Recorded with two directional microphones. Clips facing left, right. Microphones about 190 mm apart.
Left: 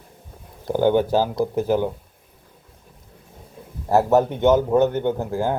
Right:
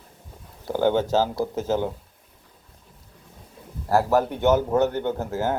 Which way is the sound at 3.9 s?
20° left (ahead or behind).